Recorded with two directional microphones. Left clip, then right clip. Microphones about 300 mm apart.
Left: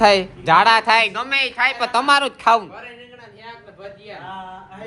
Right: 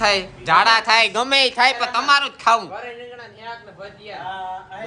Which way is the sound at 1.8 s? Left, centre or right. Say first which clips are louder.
Left 1 dB; centre.